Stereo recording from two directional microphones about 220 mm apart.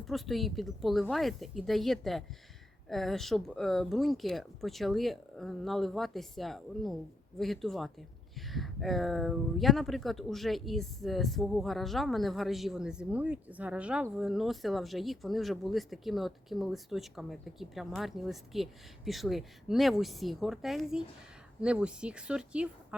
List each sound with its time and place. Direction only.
0.0 s speech: centre (ahead or behind)